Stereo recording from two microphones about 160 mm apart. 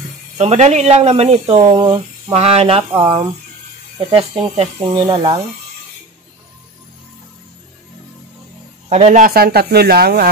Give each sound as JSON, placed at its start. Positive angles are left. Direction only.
{"t": 0.4, "sound": "speech", "side_deg": -45}
{"t": 4.0, "sound": "speech", "side_deg": -35}
{"t": 8.8, "sound": "a man's voice", "side_deg": -45}
{"t": 9.3, "sound": "speech", "side_deg": -75}